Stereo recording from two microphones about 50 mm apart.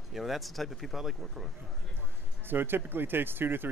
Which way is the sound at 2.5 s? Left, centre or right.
Right.